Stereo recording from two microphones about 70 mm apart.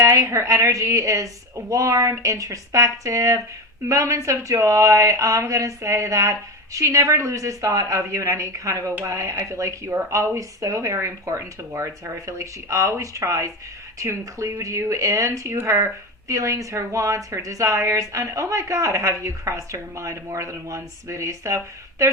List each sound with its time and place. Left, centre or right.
0.0 s a woman's voice: right